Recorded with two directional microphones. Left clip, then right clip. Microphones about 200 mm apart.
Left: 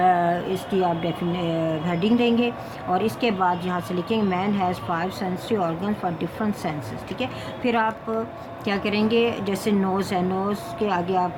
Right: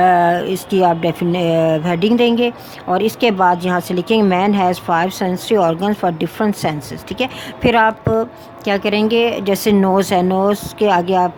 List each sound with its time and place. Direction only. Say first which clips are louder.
0.0 s speech: right 8 dB; 50° right (ahead or behind)